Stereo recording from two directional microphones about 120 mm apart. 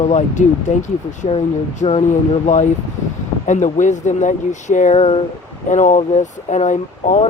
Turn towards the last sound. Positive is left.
turn(degrees=90)